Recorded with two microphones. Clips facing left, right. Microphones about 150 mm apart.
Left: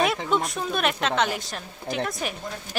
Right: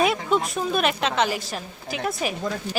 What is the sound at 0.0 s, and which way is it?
A woman's voice, centre (ahead or behind).